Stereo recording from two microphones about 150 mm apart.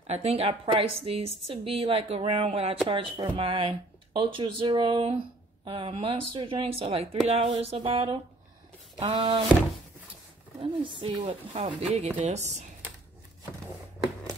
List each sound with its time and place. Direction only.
0.0 s a woman's voice: 45° right (ahead or behind)
10.6 s a woman's voice: 35° right (ahead or behind); by 12.6 s 50° right (ahead or behind)